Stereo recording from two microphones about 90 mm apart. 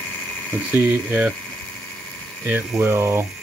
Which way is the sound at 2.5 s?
25° right (ahead or behind).